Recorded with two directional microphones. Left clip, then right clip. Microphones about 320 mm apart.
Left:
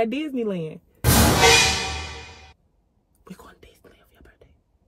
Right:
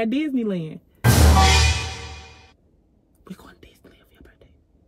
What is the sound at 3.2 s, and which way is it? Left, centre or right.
Whispering, centre.